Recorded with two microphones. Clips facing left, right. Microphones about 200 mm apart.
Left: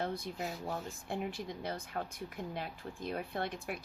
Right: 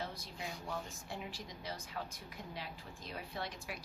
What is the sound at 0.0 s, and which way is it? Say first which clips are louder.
A woman's voice: left 7 dB; 55° left (ahead or behind).